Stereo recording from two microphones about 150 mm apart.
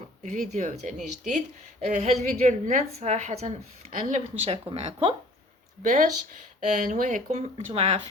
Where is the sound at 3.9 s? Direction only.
60° right (ahead or behind).